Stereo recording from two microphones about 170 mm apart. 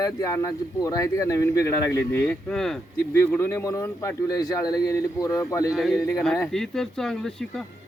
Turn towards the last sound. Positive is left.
turn(degrees=5)  # may be behind; listen again after turning